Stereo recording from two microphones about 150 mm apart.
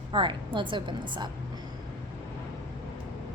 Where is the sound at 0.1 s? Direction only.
35° right (ahead or behind).